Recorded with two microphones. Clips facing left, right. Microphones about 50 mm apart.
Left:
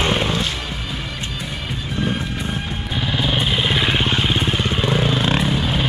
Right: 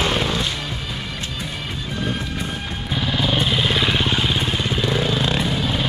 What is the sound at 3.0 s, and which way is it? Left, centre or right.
Vehicle, centre.